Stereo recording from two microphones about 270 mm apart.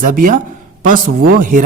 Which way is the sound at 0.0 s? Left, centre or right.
Right.